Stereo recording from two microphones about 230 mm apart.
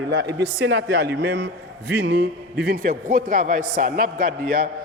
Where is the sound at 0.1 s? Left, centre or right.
Right.